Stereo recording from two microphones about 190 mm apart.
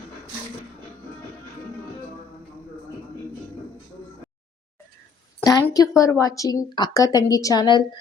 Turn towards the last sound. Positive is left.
turn(degrees=20)  # may be behind; listen again after turning